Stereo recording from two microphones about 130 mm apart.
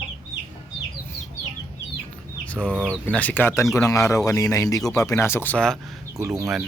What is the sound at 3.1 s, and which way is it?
A man's voice, 10° left (ahead or behind).